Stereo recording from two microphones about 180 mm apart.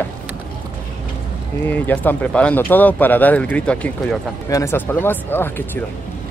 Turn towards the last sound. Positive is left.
turn(degrees=10)  # may be behind; listen again after turning